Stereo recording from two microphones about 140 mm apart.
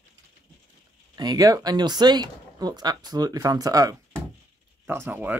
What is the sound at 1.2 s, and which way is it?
Speech, 25° right (ahead or behind).